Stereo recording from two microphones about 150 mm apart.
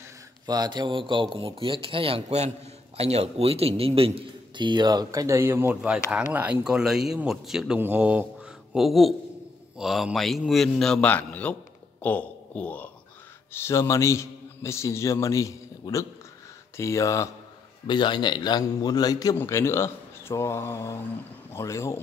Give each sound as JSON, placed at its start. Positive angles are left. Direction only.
{"t": 0.5, "sound": "a man's voice", "side_deg": -25}